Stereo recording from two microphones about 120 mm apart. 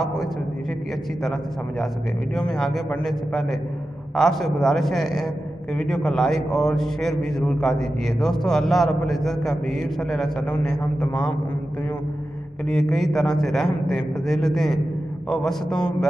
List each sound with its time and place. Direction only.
2.3 s a man's voice: 5° left (ahead or behind)
12.6 s a man's voice: centre (ahead or behind)